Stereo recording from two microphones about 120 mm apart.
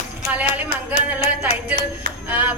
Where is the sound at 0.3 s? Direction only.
15° right (ahead or behind).